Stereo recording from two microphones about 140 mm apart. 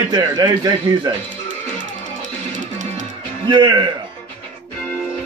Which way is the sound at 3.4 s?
35° right (ahead or behind).